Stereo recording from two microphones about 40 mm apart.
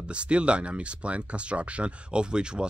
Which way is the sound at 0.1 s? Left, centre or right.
Right.